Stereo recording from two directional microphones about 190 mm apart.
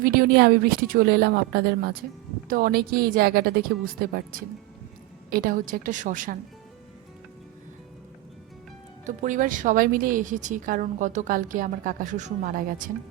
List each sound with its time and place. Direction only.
0.0 s a woman's voice: 50° right (ahead or behind)
9.0 s speech: 40° right (ahead or behind)